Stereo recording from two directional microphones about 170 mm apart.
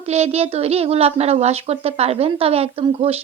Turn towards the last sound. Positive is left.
turn(degrees=-35)  # may be behind; listen again after turning